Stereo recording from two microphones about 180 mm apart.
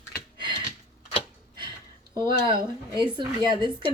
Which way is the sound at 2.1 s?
25° right (ahead or behind).